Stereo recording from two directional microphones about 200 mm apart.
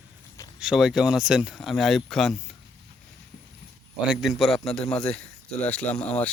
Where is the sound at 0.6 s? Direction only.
5° right (ahead or behind).